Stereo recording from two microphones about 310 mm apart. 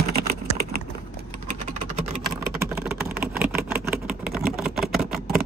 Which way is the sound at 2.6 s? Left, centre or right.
Centre.